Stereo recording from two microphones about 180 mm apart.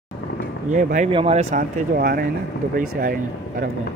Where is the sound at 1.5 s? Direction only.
55° right (ahead or behind).